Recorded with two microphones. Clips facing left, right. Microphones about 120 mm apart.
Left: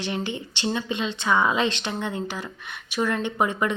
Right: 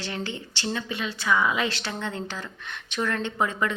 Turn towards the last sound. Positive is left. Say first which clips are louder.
# left 2 dB
turn(degrees=20)  # may be behind; listen again after turning